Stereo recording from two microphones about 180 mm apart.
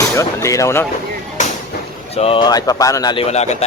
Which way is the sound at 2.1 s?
30° left (ahead or behind).